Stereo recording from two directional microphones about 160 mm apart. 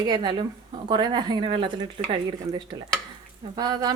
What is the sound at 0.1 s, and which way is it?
A woman's voice, 30° right (ahead or behind).